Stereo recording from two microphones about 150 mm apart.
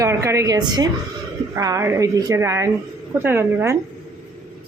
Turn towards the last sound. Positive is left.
turn(degrees=-15)  # may be behind; listen again after turning